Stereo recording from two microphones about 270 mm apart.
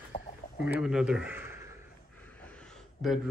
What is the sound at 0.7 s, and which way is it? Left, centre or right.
A man's voice, centre.